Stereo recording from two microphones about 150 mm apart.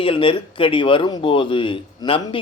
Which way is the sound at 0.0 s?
35° left (ahead or behind).